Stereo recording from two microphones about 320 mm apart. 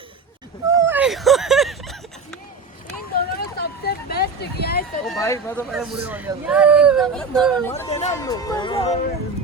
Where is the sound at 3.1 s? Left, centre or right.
Left.